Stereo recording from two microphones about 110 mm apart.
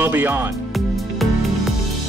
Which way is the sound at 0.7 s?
Centre (ahead or behind).